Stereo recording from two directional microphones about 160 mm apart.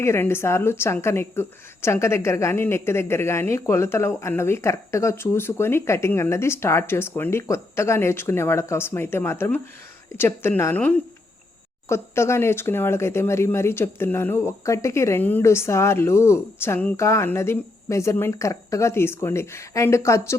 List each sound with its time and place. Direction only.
0.0 s a woman's voice: 15° left (ahead or behind)